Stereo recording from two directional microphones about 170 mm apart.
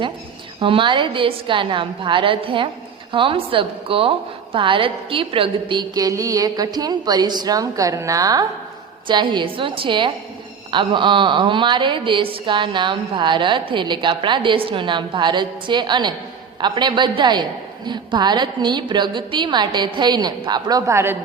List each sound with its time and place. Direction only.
0.6 s a woman's voice: 30° right (ahead or behind); by 21.2 s 15° right (ahead or behind)